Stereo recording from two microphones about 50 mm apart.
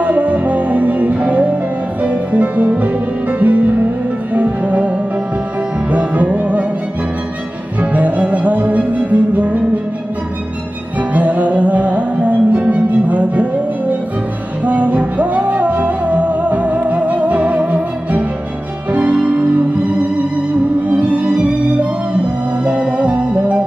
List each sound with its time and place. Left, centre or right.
0.0 s music: right
7.8 s music: right
11.1 s music: right
20.9 s violin: right
22.7 s music: right